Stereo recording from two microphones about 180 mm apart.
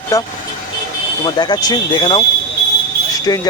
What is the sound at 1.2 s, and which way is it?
Speech, 25° left (ahead or behind).